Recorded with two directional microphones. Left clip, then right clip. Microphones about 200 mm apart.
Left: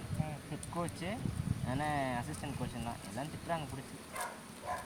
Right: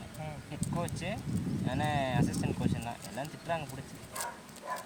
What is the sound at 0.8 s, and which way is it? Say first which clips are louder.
Speech: right 1 dB; 45° right (ahead or behind).